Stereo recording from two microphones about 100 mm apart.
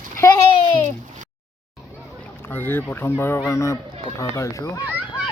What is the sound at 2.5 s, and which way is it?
Speech, 20° left (ahead or behind).